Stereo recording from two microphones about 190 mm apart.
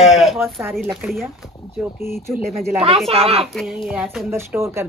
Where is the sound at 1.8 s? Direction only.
15° right (ahead or behind).